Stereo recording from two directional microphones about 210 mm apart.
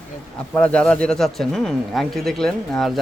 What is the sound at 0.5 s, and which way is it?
Speech, 5° left (ahead or behind).